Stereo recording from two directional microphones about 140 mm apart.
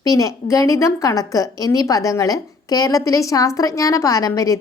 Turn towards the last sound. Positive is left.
turn(degrees=25)  # may be behind; listen again after turning